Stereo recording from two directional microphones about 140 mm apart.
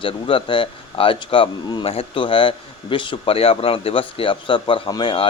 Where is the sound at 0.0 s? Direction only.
40° left (ahead or behind).